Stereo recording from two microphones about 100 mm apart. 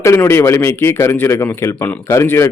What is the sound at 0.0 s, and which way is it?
A man's voice, 25° left (ahead or behind).